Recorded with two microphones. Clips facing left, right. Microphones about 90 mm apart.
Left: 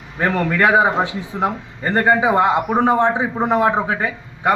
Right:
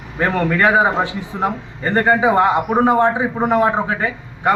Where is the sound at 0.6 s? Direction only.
20° left (ahead or behind).